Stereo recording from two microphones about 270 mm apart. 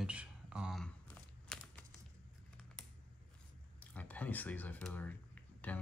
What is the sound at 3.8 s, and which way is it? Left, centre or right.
Speech, centre.